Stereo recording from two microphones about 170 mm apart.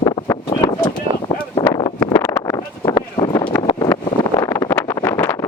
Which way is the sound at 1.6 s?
25° left (ahead or behind).